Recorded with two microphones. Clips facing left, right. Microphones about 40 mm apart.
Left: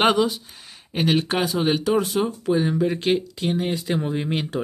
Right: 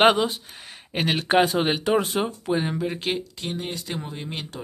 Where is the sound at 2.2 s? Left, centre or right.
Centre.